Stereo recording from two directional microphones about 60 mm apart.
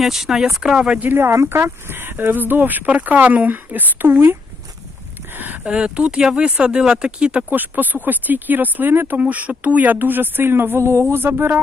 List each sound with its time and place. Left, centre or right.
0.0 s speech: centre
1.0 s speech: right
5.3 s a sound: right
5.6 s speech: centre
7.5 s speech: right
9.2 s speech: right